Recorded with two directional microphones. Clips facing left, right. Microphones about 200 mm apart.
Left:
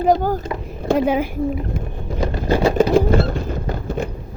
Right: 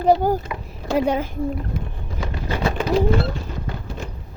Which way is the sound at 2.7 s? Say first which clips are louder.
Left 1 dB; 45° left (ahead or behind).